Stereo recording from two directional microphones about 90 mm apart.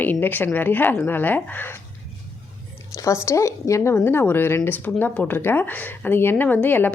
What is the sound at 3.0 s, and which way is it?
A woman's voice, 35° left (ahead or behind).